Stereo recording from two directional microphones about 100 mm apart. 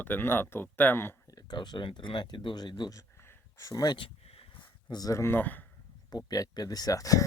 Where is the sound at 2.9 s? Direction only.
35° left (ahead or behind).